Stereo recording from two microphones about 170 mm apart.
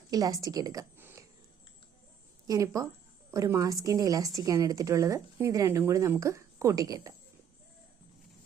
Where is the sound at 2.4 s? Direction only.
20° right (ahead or behind).